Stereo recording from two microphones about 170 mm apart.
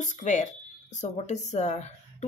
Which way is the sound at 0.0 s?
45° left (ahead or behind).